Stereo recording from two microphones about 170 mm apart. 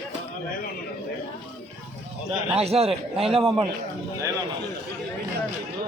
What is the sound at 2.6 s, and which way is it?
Speech, 35° right (ahead or behind).